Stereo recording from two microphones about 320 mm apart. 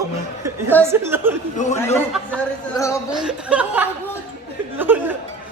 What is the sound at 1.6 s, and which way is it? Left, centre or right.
Speech, left.